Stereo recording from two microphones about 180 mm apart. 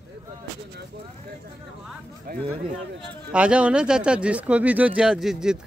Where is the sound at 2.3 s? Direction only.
55° right (ahead or behind).